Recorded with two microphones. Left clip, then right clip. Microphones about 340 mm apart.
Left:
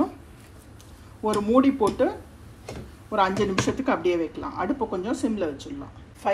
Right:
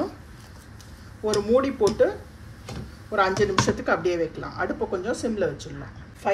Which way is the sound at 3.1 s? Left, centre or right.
Centre.